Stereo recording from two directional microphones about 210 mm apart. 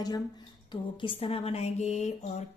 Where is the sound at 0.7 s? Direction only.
25° left (ahead or behind).